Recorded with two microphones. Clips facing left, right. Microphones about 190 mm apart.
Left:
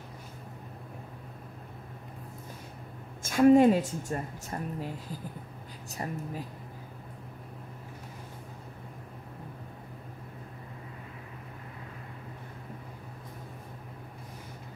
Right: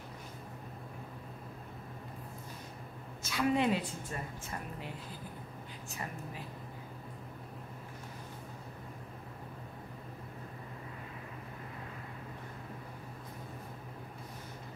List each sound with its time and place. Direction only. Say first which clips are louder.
3.2 s a woman's voice: left 11 dB; 50° left (ahead or behind)